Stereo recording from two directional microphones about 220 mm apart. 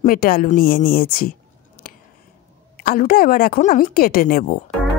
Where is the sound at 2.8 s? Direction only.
40° left (ahead or behind).